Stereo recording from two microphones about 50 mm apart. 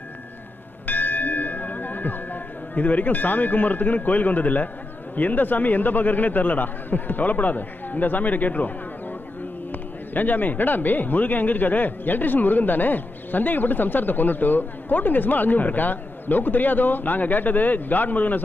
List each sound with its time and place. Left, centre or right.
0.9 s church bell: left
5.1 s speech: left
10.2 s speech: left